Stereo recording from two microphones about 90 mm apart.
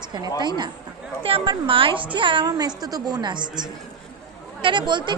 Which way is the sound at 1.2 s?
80° right.